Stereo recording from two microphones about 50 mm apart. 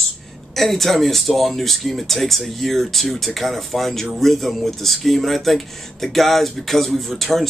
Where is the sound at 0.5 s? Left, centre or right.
Centre.